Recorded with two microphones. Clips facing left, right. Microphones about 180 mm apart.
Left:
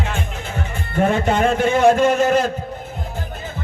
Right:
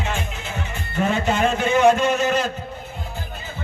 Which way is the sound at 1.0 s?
55° left (ahead or behind).